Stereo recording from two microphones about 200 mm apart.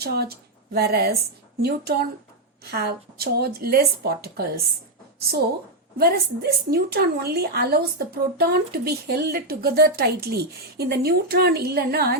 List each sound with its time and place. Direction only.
0.0 s a woman's voice: 50° right (ahead or behind)
6.0 s a woman's voice: 50° right (ahead or behind)